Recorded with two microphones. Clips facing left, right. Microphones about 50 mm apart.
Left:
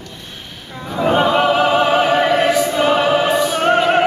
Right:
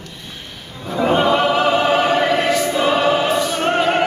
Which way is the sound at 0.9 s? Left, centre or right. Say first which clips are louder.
Left 1 dB; centre.